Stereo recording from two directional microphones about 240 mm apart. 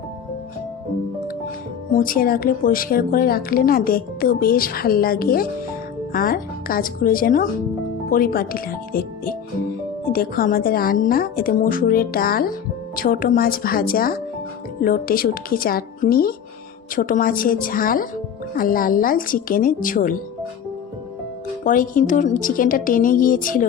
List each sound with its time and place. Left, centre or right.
2.0 s a woman's voice: left
21.6 s a woman's voice: left